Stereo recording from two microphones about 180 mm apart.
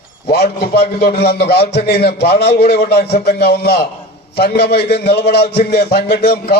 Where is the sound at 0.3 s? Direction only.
65° left (ahead or behind).